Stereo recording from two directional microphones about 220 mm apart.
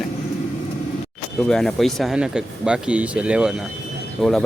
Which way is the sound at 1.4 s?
5° left (ahead or behind).